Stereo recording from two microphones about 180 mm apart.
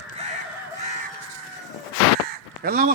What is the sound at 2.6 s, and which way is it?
Speech, 55° right (ahead or behind).